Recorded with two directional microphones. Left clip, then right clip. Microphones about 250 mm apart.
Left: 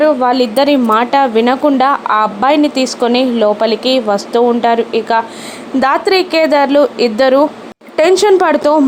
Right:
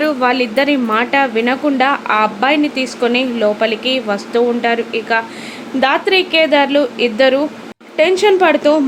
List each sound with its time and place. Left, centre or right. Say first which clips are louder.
0.0 s speech: left 4 dB; centre